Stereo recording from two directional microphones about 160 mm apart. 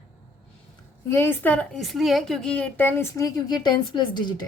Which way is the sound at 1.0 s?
15° left (ahead or behind).